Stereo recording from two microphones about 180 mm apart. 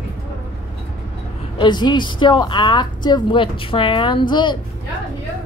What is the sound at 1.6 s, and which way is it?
Speech, 25° left (ahead or behind).